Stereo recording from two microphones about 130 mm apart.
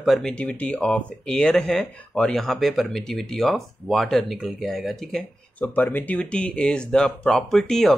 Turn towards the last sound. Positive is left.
turn(degrees=5)  # may be behind; listen again after turning